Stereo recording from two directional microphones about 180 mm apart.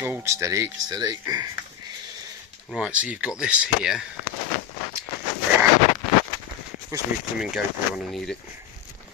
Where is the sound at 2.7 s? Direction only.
5° right (ahead or behind).